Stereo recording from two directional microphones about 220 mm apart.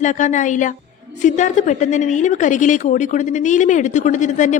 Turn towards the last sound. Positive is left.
turn(degrees=35)  # may be behind; listen again after turning